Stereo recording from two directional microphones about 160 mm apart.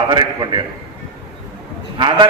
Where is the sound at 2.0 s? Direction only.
30° right (ahead or behind).